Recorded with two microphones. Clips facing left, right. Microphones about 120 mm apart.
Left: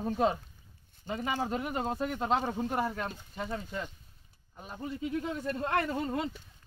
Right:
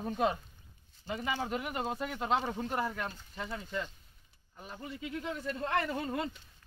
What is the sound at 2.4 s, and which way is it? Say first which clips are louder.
Speech: left 3 dB; 15° left (ahead or behind).